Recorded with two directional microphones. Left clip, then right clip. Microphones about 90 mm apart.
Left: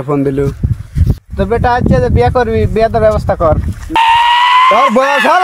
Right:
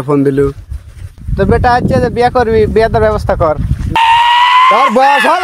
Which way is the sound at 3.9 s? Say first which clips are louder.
Even; centre (ahead or behind).